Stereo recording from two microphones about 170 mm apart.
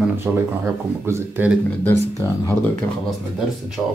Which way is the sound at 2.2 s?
15° left (ahead or behind).